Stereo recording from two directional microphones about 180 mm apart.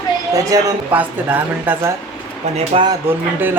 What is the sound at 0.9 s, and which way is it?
Speech, 10° right (ahead or behind).